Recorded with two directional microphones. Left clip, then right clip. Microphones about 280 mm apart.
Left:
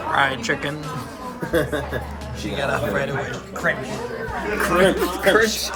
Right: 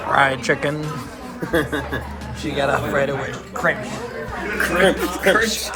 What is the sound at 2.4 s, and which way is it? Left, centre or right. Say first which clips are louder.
Speech: right 3 dB; centre.